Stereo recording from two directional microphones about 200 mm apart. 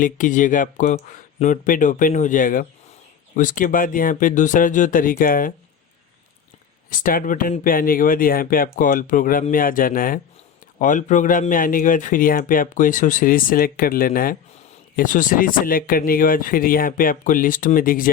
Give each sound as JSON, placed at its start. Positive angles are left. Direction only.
{"t": 0.0, "sound": "speech", "side_deg": 40}
{"t": 6.9, "sound": "speech", "side_deg": 45}